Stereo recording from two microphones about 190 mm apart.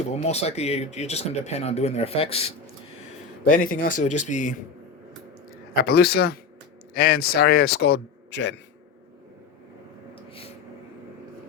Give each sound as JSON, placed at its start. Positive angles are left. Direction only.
{"t": 0.2, "sound": "speech", "side_deg": 35}
{"t": 3.4, "sound": "speech", "side_deg": 45}
{"t": 5.7, "sound": "a man's voice", "side_deg": 55}
{"t": 10.2, "sound": "a sound", "side_deg": 30}